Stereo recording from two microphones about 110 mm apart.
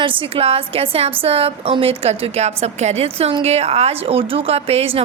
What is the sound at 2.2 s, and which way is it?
A woman's voice, 75° right (ahead or behind).